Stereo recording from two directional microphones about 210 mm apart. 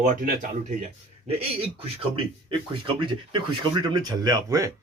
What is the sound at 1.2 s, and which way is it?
A man's voice, 30° right (ahead or behind).